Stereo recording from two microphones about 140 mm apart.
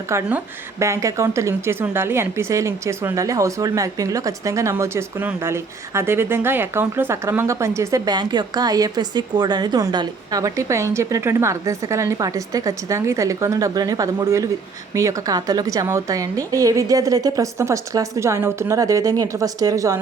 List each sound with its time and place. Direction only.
0.1 s a woman's voice: 15° right (ahead or behind)